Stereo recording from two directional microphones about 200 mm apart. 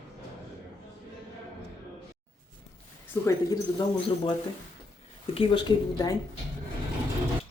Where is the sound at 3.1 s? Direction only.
15° left (ahead or behind).